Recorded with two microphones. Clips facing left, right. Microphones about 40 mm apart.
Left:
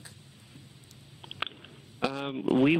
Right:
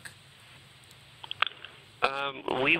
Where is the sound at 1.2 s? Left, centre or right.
Right.